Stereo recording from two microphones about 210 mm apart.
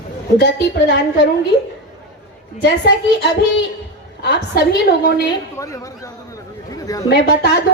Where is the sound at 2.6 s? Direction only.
50° left (ahead or behind).